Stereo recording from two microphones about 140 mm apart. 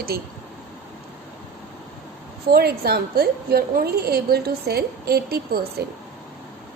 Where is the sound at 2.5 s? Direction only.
90° right.